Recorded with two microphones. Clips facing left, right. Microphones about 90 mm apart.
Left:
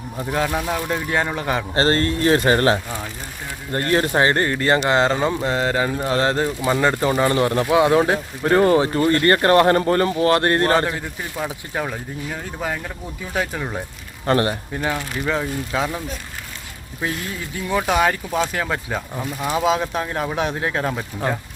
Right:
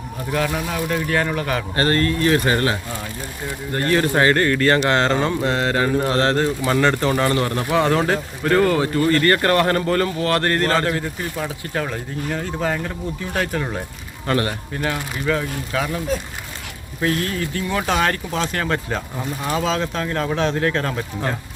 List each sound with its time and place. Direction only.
0.3 s speech: 20° left (ahead or behind)
14.3 s speech: 30° left (ahead or behind)
14.8 s speech: 20° left (ahead or behind)
17.0 s speech: 10° left (ahead or behind)